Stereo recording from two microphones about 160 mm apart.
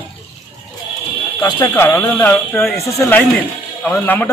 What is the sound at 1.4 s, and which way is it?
Speech, 15° left (ahead or behind).